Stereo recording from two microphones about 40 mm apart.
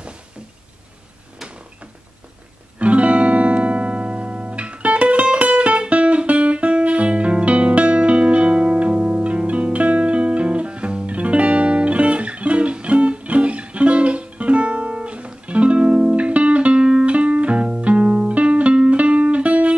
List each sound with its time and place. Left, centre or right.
2.8 s music: right